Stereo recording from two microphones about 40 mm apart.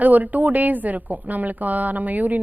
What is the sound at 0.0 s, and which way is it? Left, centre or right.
A woman's voice, right.